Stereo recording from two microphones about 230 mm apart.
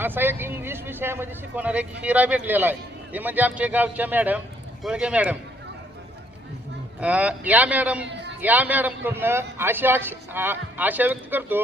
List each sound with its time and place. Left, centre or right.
0.0 s speech: centre
7.0 s speech: centre
8.0 s a sound: right
8.4 s speech: centre